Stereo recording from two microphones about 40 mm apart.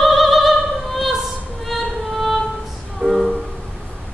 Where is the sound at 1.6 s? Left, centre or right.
Centre.